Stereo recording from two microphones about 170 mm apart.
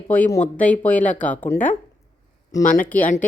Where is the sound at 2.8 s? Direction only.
10° left (ahead or behind).